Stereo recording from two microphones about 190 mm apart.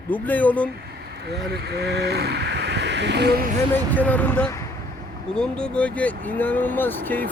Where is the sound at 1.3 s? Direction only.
60° right (ahead or behind).